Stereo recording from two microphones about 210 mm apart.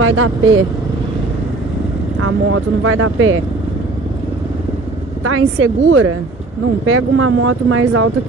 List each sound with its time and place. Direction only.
0.0 s speech: 75° right (ahead or behind)
2.1 s speech: 90° right; by 3.4 s 70° right (ahead or behind)
5.2 s speech: 80° right